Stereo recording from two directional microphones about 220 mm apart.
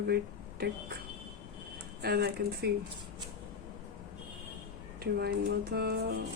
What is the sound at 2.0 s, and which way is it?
Speech, 45° right (ahead or behind).